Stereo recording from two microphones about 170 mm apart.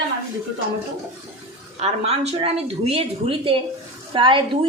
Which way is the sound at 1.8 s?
35° right (ahead or behind).